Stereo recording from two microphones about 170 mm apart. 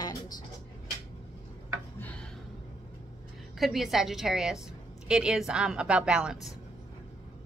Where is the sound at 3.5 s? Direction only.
Centre (ahead or behind).